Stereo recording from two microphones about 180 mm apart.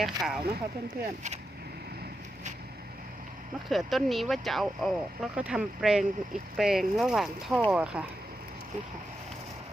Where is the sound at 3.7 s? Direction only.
Centre (ahead or behind).